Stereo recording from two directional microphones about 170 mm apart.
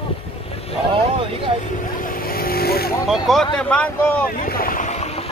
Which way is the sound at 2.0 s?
60° left (ahead or behind).